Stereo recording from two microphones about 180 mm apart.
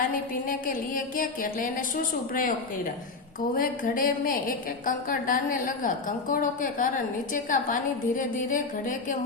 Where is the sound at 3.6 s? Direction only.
50° left (ahead or behind).